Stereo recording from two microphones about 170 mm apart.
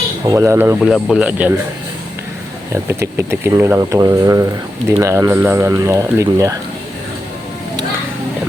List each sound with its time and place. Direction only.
0.3 s speech: 15° right (ahead or behind)
0.8 s speech: centre (ahead or behind)
2.8 s speech: 15° right (ahead or behind)